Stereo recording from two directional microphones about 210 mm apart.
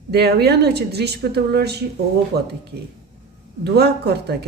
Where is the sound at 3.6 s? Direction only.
50° right (ahead or behind).